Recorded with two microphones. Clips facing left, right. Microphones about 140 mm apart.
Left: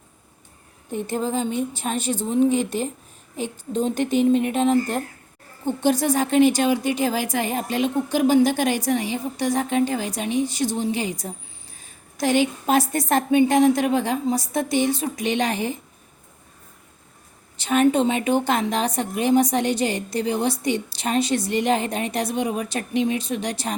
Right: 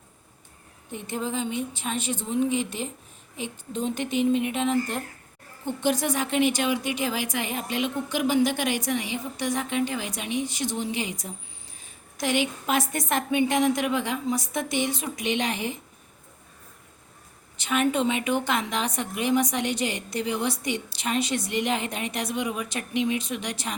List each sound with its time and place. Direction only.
0.9 s a woman's voice: 40° left (ahead or behind)
17.6 s a woman's voice: 35° left (ahead or behind)